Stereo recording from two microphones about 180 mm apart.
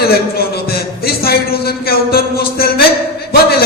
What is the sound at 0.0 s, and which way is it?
Speech, 60° left (ahead or behind).